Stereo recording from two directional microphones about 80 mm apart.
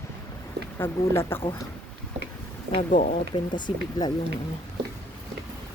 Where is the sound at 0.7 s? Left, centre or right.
Left.